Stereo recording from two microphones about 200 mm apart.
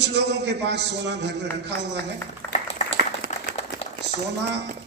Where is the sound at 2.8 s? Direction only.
35° left (ahead or behind).